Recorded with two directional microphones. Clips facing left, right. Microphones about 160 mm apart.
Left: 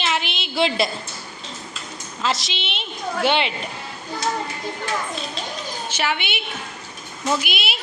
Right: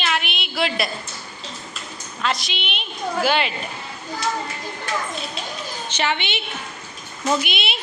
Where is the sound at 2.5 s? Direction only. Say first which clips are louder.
Even; 30° left (ahead or behind).